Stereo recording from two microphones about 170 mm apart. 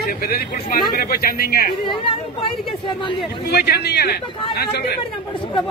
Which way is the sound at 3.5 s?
70° left (ahead or behind).